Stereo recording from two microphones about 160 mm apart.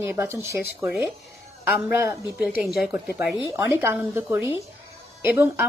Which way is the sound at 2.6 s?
Centre (ahead or behind).